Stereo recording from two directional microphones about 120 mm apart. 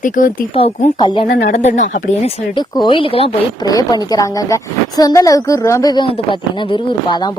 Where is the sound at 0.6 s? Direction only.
60° left (ahead or behind).